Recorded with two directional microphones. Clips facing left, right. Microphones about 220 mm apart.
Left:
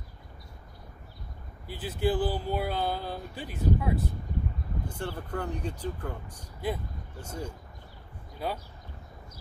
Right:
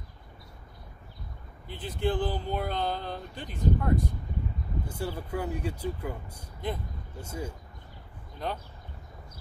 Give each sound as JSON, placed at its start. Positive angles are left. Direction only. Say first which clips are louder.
{"t": 1.7, "sound": "speech", "louder": "left 1 dB", "side_deg": 5}
{"t": 4.8, "sound": "speech", "louder": "right 1 dB", "side_deg": -5}
{"t": 6.6, "sound": "speech", "louder": "left 2 dB", "side_deg": 5}
{"t": 7.2, "sound": "speech", "louder": "right 1 dB", "side_deg": -5}
{"t": 8.4, "sound": "speech", "louder": "left 1 dB", "side_deg": 10}